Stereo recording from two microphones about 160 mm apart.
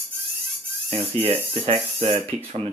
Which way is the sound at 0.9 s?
40° right (ahead or behind).